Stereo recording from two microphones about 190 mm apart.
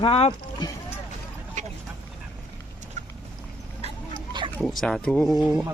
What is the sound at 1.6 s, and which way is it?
Vehicle, 35° right (ahead or behind).